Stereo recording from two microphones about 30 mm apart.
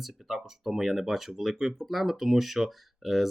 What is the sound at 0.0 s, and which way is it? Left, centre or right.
Speech, centre.